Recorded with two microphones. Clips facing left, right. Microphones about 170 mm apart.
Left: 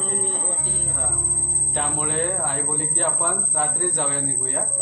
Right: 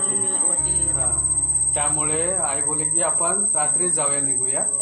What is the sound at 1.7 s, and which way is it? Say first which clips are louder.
Speech: even; 5° right (ahead or behind).